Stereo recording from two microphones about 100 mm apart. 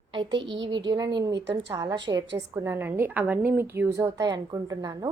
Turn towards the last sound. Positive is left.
turn(degrees=-40)  # may be behind; listen again after turning